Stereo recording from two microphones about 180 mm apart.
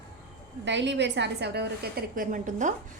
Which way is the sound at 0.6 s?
80° right.